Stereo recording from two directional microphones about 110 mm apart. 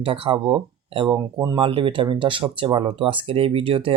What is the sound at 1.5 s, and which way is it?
Speech, 50° right (ahead or behind).